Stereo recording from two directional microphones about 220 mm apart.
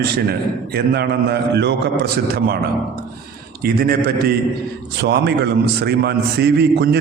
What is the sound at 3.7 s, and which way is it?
Speech, 45° right (ahead or behind).